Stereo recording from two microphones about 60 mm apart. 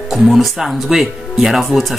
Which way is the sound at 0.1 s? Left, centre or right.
Centre.